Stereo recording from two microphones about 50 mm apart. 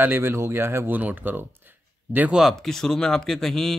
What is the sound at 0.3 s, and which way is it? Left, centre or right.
Speech, right.